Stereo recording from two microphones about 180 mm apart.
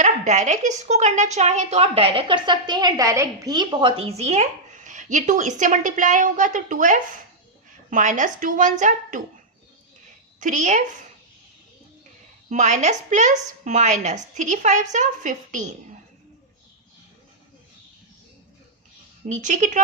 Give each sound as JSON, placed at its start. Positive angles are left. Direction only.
{"t": 0.0, "sound": "a woman's voice", "side_deg": -40}
{"t": 10.4, "sound": "a woman's voice", "side_deg": -45}
{"t": 12.5, "sound": "a woman's voice", "side_deg": -45}
{"t": 19.3, "sound": "a woman's voice", "side_deg": -45}